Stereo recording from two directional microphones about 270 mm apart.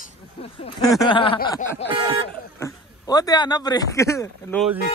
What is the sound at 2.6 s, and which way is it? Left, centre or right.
Speech, centre.